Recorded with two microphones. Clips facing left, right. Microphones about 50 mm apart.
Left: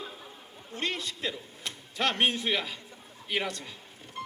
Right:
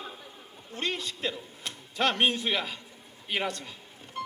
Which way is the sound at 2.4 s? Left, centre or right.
Right.